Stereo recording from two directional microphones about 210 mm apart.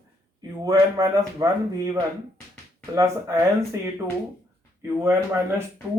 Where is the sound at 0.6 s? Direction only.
15° right (ahead or behind).